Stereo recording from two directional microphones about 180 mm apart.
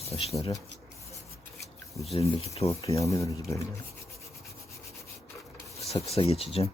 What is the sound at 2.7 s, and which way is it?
Speech, 15° left (ahead or behind).